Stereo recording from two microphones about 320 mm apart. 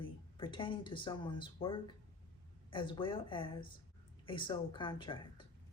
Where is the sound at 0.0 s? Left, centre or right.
Centre.